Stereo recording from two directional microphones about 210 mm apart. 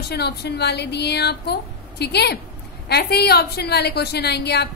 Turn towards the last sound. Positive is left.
turn(degrees=50)  # may be behind; listen again after turning